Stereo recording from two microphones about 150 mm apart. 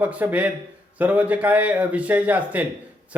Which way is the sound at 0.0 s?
10° right (ahead or behind).